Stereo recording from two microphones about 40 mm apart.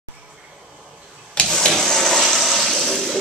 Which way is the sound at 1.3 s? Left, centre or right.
Left.